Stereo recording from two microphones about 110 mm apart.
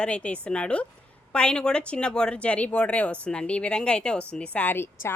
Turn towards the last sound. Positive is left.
turn(degrees=20)  # may be behind; listen again after turning